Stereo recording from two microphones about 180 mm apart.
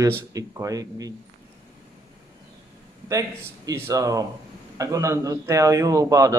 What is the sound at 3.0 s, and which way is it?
A man's voice, 20° right (ahead or behind).